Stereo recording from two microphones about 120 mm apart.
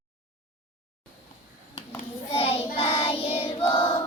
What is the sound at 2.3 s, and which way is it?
Child singing, 55° left (ahead or behind).